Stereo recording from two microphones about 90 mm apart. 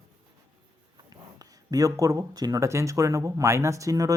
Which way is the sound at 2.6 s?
35° right (ahead or behind).